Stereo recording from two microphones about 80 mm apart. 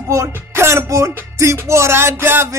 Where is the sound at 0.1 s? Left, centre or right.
Right.